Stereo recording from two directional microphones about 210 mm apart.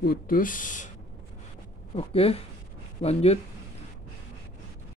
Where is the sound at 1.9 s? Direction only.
30° left (ahead or behind).